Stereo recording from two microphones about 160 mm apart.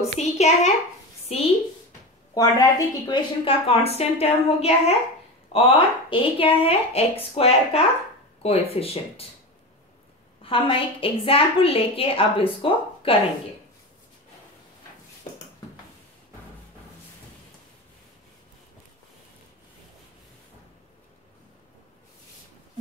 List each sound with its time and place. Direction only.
0.2 s a child's voice: 40° left (ahead or behind)
2.3 s a woman's voice: 25° left (ahead or behind)
10.4 s a woman's voice: 35° left (ahead or behind)